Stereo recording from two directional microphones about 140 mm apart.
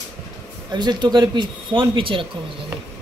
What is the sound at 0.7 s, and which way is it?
Speech, 30° right (ahead or behind).